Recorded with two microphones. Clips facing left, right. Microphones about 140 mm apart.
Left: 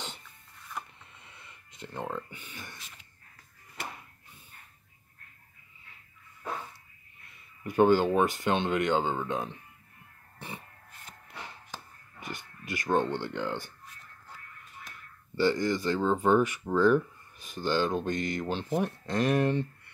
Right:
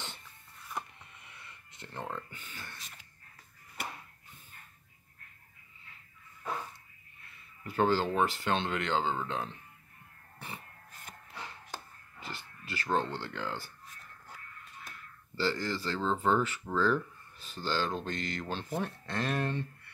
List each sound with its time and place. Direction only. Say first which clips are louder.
1.1 s a sound: even; 25° left (ahead or behind)
2.0 s speech: left 4 dB; 10° left (ahead or behind)
7.6 s speech: left 6 dB; 15° left (ahead or behind)
12.2 s speech: left 3 dB; 15° left (ahead or behind)
15.3 s speech: left 6 dB; 20° left (ahead or behind)